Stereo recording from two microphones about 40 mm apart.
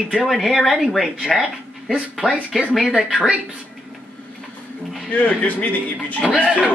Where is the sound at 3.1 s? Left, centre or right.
Right.